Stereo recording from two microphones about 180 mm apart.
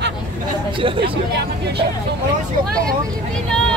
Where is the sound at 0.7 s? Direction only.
30° right (ahead or behind).